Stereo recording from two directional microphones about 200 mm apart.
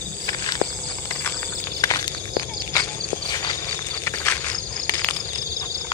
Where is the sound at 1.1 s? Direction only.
10° left (ahead or behind).